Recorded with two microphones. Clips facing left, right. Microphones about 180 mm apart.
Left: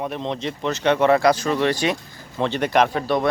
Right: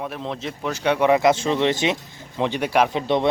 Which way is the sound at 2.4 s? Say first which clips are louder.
Left 1 dB; 10° right (ahead or behind).